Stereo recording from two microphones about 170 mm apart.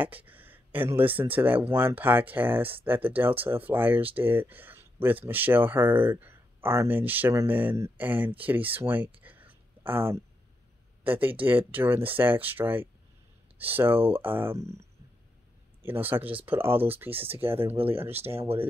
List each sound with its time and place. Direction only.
0.0 s a sound: 10° right (ahead or behind)
1.3 s speech: 10° right (ahead or behind)
9.2 s whispering: 10° right (ahead or behind)
11.1 s speech: 10° right (ahead or behind)
15.8 s speech: 10° right (ahead or behind)
17.6 s speech: 35° right (ahead or behind)